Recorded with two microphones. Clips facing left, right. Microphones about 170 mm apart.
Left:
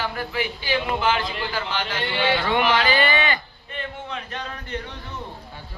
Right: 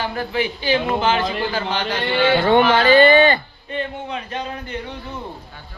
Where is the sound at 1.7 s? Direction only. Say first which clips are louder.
Right 5 dB; 40° right (ahead or behind).